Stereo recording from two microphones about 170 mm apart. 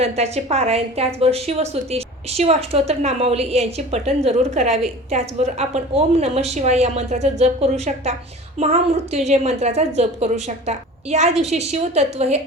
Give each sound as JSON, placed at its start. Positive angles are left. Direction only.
{"t": 0.0, "sound": "a woman's voice", "side_deg": -40}